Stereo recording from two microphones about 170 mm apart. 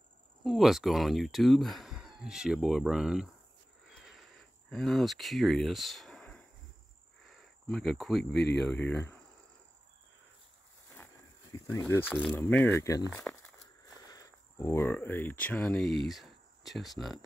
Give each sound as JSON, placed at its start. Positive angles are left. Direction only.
{"t": 0.4, "sound": "speech", "side_deg": 0}
{"t": 3.9, "sound": "a sound", "side_deg": 0}
{"t": 7.2, "sound": "cricket", "side_deg": 0}
{"t": 8.3, "sound": "speech", "side_deg": 80}
{"t": 8.5, "sound": "speech", "side_deg": 5}
{"t": 11.5, "sound": "a sound", "side_deg": 15}
{"t": 12.1, "sound": "speech", "side_deg": 5}